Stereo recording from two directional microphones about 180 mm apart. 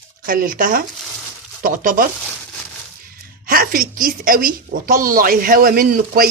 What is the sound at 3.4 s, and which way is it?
A woman's voice, 55° right (ahead or behind).